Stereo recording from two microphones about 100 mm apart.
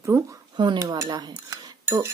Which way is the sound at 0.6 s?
45° right (ahead or behind).